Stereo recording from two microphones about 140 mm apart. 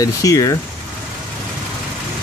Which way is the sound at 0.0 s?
25° left (ahead or behind).